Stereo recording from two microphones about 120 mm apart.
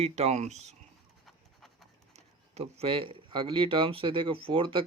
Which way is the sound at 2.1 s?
65° right (ahead or behind).